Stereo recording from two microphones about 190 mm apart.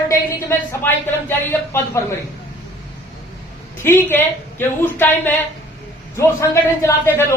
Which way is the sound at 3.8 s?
10° left (ahead or behind).